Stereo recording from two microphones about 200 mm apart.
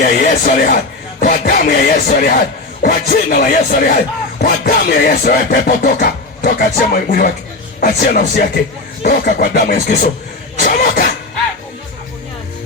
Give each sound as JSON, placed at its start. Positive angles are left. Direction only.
{"t": 0.0, "sound": "speech", "side_deg": 45}